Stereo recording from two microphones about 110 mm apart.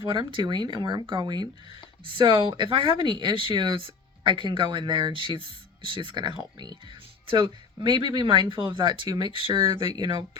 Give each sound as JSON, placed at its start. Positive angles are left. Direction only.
{"t": 0.0, "sound": "speech", "side_deg": -45}